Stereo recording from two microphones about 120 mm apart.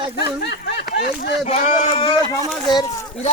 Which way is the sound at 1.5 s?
60° left (ahead or behind).